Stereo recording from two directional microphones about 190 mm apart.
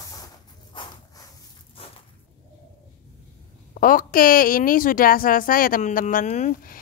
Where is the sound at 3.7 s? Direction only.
45° left (ahead or behind).